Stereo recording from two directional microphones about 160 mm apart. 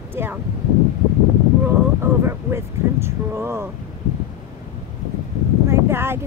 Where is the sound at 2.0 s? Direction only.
15° right (ahead or behind).